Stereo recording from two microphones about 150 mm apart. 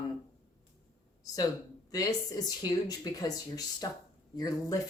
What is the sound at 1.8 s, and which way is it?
Speech, 25° left (ahead or behind).